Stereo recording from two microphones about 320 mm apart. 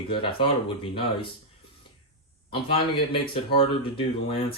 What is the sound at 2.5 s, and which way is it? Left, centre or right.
Speech, centre.